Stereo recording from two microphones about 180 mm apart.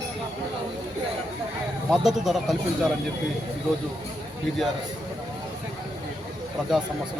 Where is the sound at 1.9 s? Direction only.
Centre (ahead or behind).